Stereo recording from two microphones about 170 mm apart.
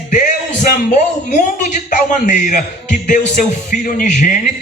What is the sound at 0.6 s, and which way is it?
A man's voice, 50° left (ahead or behind).